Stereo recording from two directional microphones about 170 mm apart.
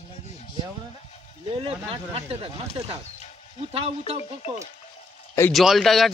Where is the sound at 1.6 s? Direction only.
35° right (ahead or behind).